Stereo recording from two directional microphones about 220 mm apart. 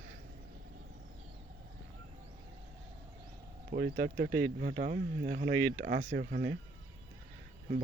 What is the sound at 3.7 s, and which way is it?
Speech, 40° right (ahead or behind).